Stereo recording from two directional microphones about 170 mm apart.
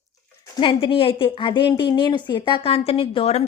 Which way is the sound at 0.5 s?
30° left (ahead or behind).